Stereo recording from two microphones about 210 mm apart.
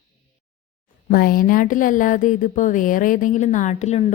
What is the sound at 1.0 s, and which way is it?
Speech, 45° left (ahead or behind).